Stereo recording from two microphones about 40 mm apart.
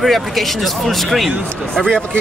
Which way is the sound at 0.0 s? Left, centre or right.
Centre.